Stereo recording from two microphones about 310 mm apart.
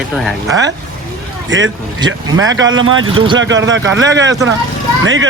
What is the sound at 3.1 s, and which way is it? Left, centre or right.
Speech, centre.